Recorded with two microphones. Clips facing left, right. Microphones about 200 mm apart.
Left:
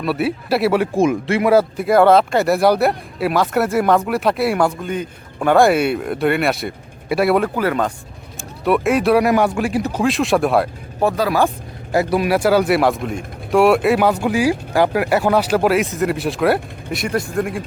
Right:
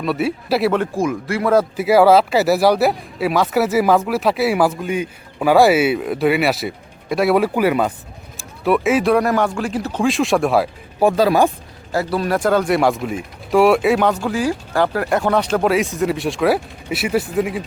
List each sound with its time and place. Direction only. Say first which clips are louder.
0.0 s speech: even; centre (ahead or behind)
0.9 s speech: left 4 dB; 25° left (ahead or behind)
1.7 s speech: even; 5° right (ahead or behind)
11.9 s speech: left 3 dB; 15° left (ahead or behind)
14.1 s speech: left 3 dB; 15° left (ahead or behind); by 17.6 s 5° right (ahead or behind)